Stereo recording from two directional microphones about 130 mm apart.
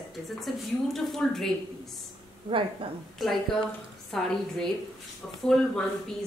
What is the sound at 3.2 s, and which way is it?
A woman's voice, centre (ahead or behind).